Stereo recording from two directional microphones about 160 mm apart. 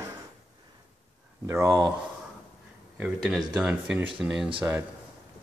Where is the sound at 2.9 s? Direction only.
5° right (ahead or behind).